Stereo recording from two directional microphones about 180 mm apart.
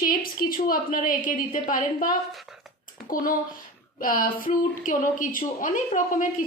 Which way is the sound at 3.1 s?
50° left (ahead or behind).